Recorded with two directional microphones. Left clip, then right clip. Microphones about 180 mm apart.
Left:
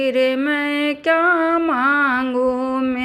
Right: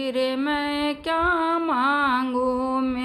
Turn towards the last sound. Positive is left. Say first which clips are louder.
# left 4 dB
turn(degrees=10)  # may be behind; listen again after turning